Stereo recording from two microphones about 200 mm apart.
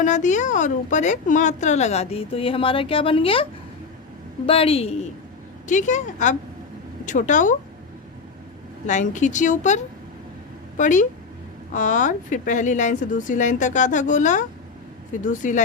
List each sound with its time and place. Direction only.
0.0 s a woman's voice: 35° left (ahead or behind)
4.4 s a woman's voice: 30° left (ahead or behind)
8.9 s a woman's voice: 40° left (ahead or behind)